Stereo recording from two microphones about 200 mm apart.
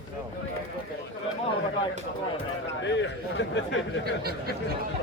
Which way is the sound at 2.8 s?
65° left (ahead or behind).